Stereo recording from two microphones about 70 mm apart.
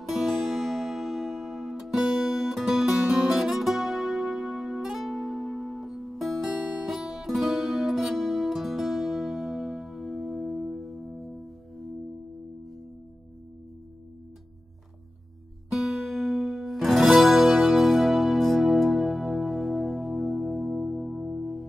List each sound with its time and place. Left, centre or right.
0.1 s music: centre
6.5 s music: centre
6.9 s music: centre
15.7 s music: centre